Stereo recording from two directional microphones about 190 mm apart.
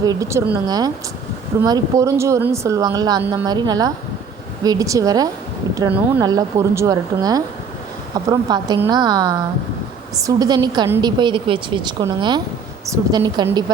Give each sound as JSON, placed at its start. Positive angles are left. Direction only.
{"t": 0.0, "sound": "speech", "side_deg": -20}